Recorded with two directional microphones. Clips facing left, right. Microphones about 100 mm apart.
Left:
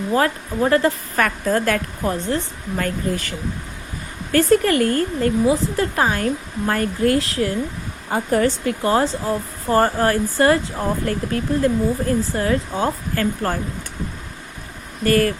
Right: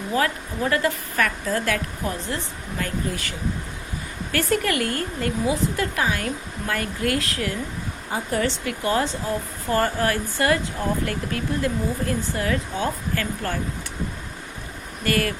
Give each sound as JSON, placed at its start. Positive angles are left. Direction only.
{"t": 0.1, "sound": "speech", "side_deg": 40}
{"t": 8.1, "sound": "speech", "side_deg": 40}
{"t": 15.0, "sound": "speech", "side_deg": 35}